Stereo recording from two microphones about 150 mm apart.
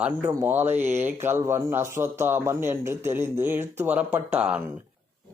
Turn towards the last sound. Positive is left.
turn(degrees=-10)  # may be behind; listen again after turning